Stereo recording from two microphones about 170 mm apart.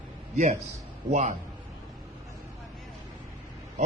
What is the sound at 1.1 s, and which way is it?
Speech, 45° right (ahead or behind).